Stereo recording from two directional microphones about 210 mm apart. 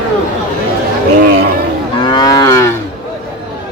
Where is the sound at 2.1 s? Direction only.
20° left (ahead or behind).